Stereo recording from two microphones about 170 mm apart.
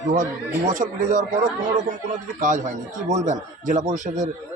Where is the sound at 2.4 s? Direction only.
45° right (ahead or behind).